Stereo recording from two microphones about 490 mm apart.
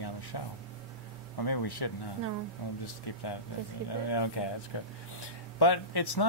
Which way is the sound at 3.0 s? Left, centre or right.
Left.